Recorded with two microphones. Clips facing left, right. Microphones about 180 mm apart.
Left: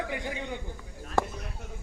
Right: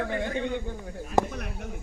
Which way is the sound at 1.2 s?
20° right (ahead or behind).